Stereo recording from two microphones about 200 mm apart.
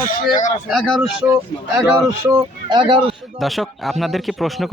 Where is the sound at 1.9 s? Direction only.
10° right (ahead or behind).